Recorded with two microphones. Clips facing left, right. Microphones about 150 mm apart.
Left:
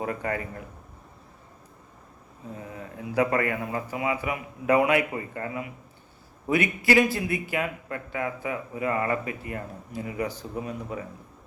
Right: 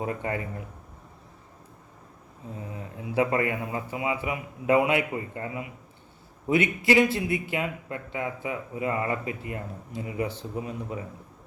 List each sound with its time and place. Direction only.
0.0 s a man's voice: 25° right (ahead or behind)
2.7 s a man's voice: 25° right (ahead or behind)